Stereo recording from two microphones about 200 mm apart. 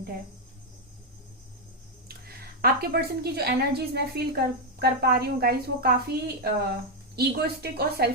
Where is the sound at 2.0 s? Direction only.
50° right (ahead or behind).